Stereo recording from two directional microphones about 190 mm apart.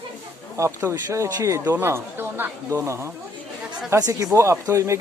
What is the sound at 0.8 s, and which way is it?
Speech, 15° right (ahead or behind).